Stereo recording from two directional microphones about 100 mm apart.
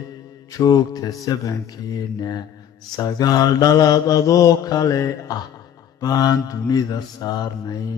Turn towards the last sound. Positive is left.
turn(degrees=40)  # may be behind; listen again after turning